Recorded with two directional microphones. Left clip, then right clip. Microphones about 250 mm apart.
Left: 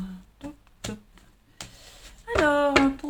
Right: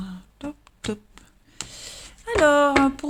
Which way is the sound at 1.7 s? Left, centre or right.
Right.